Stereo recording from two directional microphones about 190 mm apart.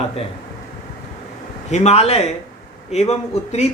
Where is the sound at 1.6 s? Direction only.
35° left (ahead or behind).